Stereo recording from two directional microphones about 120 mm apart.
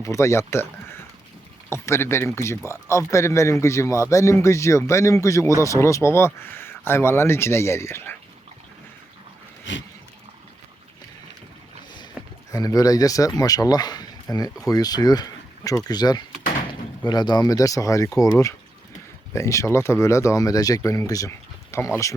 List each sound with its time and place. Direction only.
0.0 s speech: 25° left (ahead or behind)
12.2 s a sound: 5° right (ahead or behind)
12.5 s speech: 30° left (ahead or behind)